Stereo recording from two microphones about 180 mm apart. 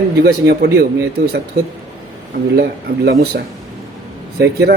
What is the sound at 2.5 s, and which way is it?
Speech, 60° right (ahead or behind).